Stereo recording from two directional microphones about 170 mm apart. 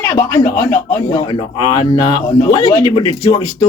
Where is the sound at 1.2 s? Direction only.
30° left (ahead or behind).